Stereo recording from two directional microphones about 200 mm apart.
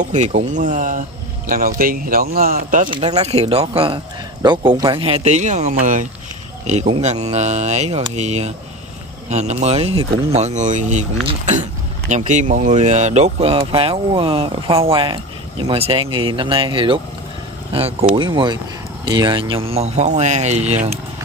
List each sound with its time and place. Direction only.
0.0 s speech: 35° right (ahead or behind)
2.9 s speech: 30° right (ahead or behind)
18.1 s speech: 25° right (ahead or behind)